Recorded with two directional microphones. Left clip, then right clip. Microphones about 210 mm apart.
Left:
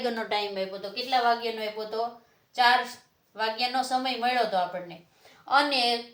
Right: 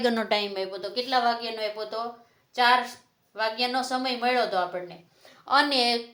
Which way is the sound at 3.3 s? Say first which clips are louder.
Right 1 dB; 40° right (ahead or behind).